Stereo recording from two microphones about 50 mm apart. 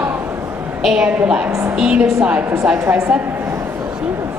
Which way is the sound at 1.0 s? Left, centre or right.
Right.